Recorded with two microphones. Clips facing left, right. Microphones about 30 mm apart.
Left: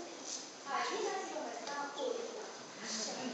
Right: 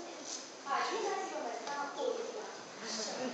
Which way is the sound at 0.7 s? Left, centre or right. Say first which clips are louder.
Right 2 dB; centre.